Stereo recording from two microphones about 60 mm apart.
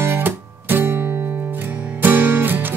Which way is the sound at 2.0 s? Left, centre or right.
Right.